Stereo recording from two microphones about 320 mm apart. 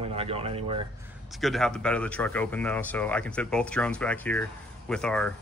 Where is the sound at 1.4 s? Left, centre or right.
Centre.